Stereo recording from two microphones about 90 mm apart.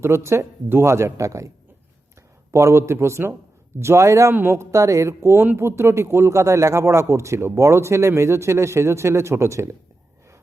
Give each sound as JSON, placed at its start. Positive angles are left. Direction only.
{"t": 0.0, "sound": "a man's voice", "side_deg": -30}
{"t": 2.5, "sound": "a man's voice", "side_deg": -30}